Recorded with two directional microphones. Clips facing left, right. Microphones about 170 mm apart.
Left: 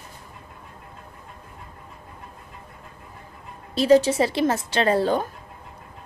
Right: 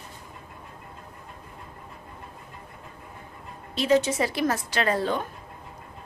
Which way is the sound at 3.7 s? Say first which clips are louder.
Left 5 dB; 35° left (ahead or behind).